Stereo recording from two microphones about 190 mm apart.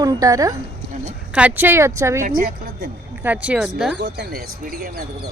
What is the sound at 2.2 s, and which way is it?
Speech, 50° right (ahead or behind).